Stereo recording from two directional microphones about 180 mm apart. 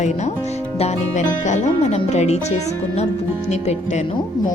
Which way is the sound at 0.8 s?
40° left (ahead or behind).